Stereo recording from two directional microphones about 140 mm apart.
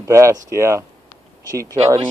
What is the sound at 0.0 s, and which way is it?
Speech, 20° right (ahead or behind).